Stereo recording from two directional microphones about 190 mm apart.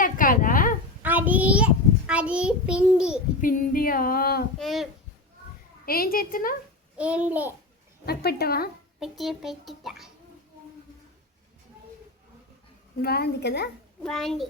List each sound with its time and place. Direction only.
0.0 s a sound: 45° left (ahead or behind)
1.0 s child singing: 10° right (ahead or behind)
3.4 s female singing: 45° left (ahead or behind)
4.6 s a child's voice: centre (ahead or behind)
5.8 s female singing: 50° left (ahead or behind)
6.9 s a child's voice: 5° right (ahead or behind)
8.0 s a woman's voice: 55° left (ahead or behind)
9.0 s a child's voice: centre (ahead or behind)
13.0 s a woman's voice: 55° left (ahead or behind)
14.0 s a child's voice: centre (ahead or behind)